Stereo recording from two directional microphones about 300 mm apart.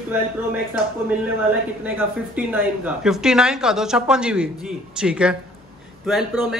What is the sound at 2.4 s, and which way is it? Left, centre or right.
Speech, centre.